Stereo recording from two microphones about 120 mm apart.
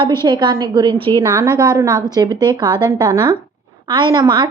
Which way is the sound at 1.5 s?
30° right (ahead or behind).